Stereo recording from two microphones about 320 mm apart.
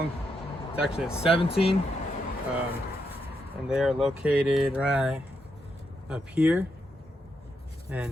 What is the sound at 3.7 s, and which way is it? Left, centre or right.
Speech, centre.